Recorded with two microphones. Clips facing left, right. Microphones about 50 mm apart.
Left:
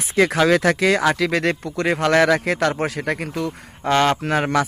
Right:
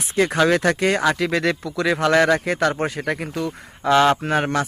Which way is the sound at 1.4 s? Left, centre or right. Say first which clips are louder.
Even; left.